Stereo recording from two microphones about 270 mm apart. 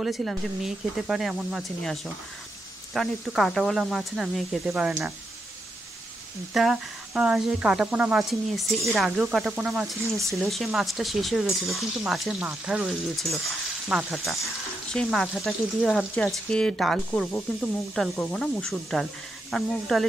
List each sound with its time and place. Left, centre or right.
0.0 s speech: centre
6.5 s speech: centre